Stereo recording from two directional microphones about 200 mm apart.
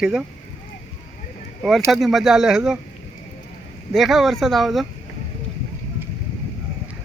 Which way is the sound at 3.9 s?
Centre (ahead or behind).